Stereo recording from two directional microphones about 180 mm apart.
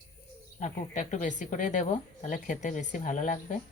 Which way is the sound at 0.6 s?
45° left (ahead or behind).